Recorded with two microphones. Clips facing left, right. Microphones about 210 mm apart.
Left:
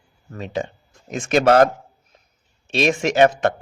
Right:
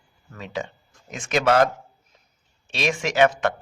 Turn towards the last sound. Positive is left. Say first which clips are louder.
# left 4 dB
turn(degrees=40)  # may be behind; listen again after turning